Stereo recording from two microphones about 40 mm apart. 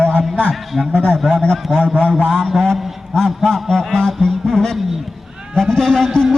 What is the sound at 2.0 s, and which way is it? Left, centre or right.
Speech, left.